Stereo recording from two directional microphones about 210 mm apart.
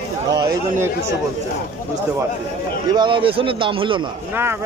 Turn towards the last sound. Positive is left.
turn(degrees=-25)  # may be behind; listen again after turning